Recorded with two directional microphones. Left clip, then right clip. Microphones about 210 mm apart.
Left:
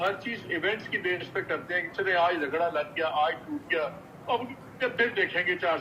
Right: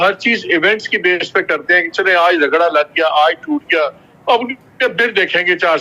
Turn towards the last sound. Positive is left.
turn(degrees=-60)  # may be behind; listen again after turning